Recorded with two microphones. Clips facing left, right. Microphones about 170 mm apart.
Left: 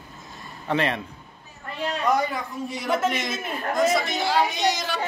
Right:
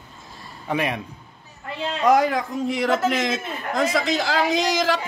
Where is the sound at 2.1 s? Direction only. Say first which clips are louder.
Right 7 dB; 90° right.